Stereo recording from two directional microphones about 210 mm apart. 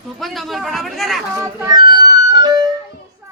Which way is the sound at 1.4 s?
15° right (ahead or behind).